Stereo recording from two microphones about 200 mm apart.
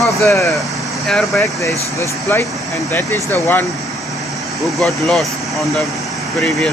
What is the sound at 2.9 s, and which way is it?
Speech, 15° left (ahead or behind).